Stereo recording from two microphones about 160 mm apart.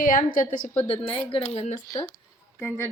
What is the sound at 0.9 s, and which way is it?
Speech, 35° left (ahead or behind).